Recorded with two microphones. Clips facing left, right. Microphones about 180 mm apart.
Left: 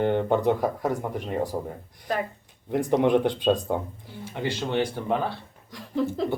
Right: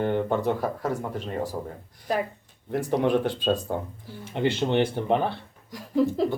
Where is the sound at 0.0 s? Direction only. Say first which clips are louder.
Left 2 dB; 20° left (ahead or behind).